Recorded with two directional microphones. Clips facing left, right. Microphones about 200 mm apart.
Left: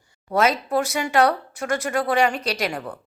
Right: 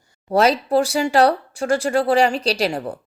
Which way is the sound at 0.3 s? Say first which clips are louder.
Right 4 dB; 35° right (ahead or behind).